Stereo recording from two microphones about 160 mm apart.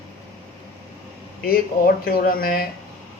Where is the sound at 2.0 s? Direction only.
65° left (ahead or behind).